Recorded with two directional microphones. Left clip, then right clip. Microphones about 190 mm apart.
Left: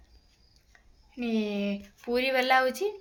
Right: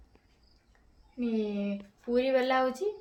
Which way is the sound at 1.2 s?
45° left (ahead or behind).